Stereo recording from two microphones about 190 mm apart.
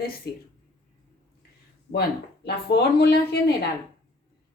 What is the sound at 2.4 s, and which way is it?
Speech, 60° left (ahead or behind).